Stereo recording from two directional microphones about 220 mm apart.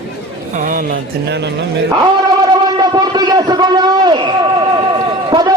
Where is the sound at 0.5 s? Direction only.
35° right (ahead or behind).